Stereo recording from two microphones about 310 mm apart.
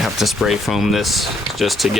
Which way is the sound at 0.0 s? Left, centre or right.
Centre.